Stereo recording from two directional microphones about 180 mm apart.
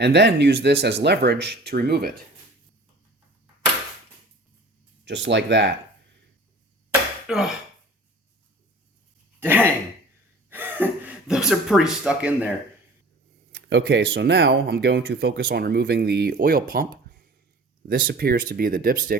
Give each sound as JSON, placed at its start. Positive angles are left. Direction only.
{"t": 0.0, "sound": "speech", "side_deg": -70}
{"t": 5.0, "sound": "speech", "side_deg": -75}
{"t": 7.3, "sound": "speech", "side_deg": -5}
{"t": 9.4, "sound": "speech", "side_deg": -10}
{"t": 13.5, "sound": "speech", "side_deg": -75}